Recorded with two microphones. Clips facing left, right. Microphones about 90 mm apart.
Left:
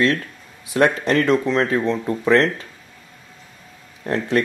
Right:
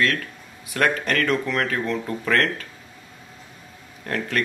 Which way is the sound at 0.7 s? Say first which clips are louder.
Left 5 dB; 25° left (ahead or behind).